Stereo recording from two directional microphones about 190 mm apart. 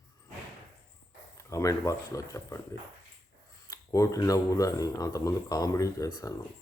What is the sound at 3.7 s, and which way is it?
Speech, 15° left (ahead or behind).